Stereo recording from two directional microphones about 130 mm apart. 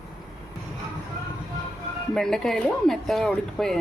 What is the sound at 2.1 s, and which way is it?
A woman's voice, 5° left (ahead or behind).